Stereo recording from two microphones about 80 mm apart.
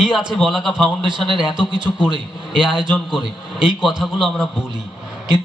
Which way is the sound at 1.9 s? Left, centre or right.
Left.